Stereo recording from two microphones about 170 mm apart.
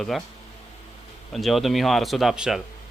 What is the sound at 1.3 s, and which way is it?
Speech, centre (ahead or behind).